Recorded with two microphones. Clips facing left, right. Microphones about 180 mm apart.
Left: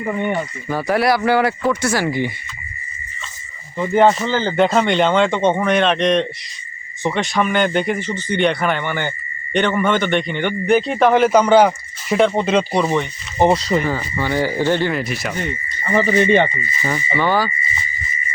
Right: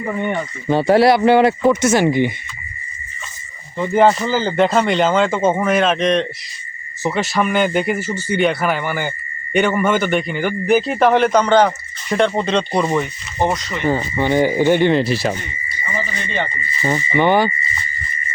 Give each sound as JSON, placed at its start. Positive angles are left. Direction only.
{"t": 0.1, "sound": "speech", "side_deg": 5}
{"t": 0.7, "sound": "speech", "side_deg": -25}
{"t": 3.8, "sound": "speech", "side_deg": 0}
{"t": 13.5, "sound": "speech", "side_deg": 35}
{"t": 13.8, "sound": "speech", "side_deg": -20}
{"t": 15.8, "sound": "speech", "side_deg": 60}
{"t": 16.8, "sound": "speech", "side_deg": -20}